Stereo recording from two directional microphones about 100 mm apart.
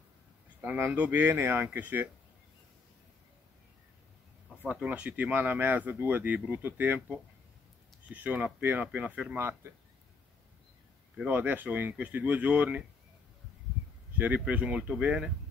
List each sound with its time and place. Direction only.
0.6 s speech: 20° right (ahead or behind)
4.6 s speech: 15° right (ahead or behind)
11.1 s speech: 20° right (ahead or behind)
14.1 s speech: 15° right (ahead or behind)